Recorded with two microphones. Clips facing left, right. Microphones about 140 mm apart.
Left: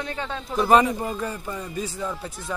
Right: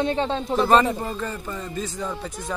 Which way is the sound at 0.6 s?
10° left (ahead or behind).